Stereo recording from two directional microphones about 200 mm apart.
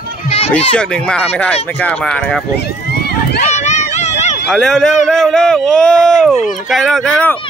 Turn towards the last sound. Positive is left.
turn(degrees=5)  # may be behind; listen again after turning